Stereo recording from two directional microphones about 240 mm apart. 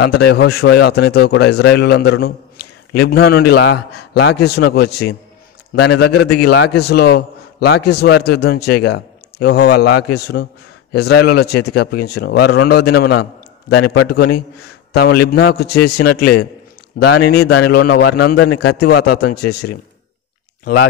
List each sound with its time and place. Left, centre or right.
0.3 s a man's voice: left
17.3 s speech: left